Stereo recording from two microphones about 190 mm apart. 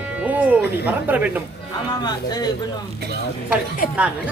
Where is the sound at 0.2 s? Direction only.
10° right (ahead or behind).